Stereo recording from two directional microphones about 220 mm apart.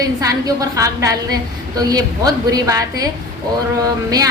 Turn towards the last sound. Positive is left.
turn(degrees=-15)  # may be behind; listen again after turning